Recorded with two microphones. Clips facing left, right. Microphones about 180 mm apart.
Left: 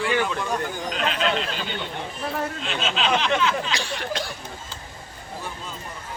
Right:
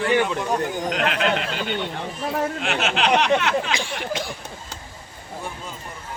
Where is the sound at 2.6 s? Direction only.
70° right (ahead or behind).